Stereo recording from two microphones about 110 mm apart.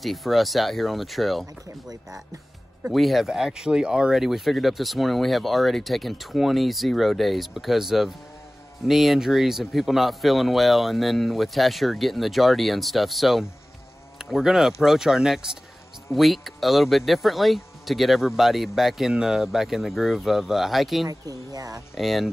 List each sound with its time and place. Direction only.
0.0 s speech: centre (ahead or behind)
2.9 s speech: centre (ahead or behind)
21.1 s speech: 35° right (ahead or behind)
21.9 s speech: centre (ahead or behind)